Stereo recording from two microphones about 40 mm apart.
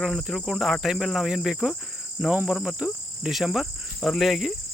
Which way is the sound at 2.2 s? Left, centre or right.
Right.